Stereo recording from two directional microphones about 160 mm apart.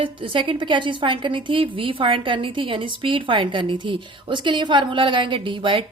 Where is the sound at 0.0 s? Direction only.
30° right (ahead or behind).